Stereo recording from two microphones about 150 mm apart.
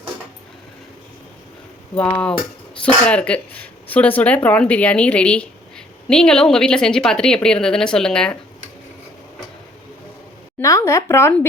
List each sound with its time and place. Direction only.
2.0 s a woman's voice: 10° left (ahead or behind)
10.6 s speech: 20° left (ahead or behind)